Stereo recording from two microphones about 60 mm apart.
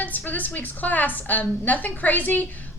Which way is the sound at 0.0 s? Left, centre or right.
Left.